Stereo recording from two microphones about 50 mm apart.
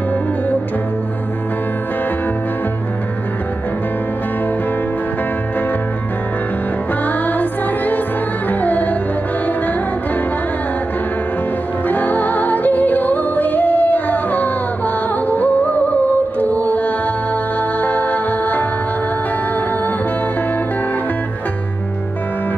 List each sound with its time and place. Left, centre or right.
7.1 s music: left
11.9 s music: left